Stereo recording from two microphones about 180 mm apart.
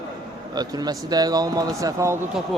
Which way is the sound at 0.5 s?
20° right (ahead or behind).